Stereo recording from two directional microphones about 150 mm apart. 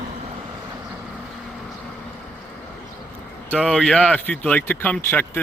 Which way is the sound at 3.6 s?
5° left (ahead or behind).